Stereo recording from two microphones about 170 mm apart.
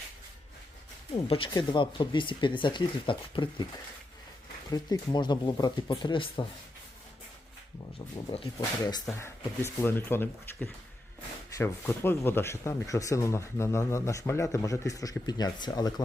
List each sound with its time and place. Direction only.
1.1 s speech: 30° left (ahead or behind)
4.7 s speech: 25° left (ahead or behind)
8.8 s speech: 25° left (ahead or behind)